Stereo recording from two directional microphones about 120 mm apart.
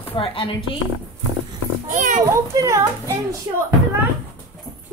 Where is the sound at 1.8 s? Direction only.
90° right.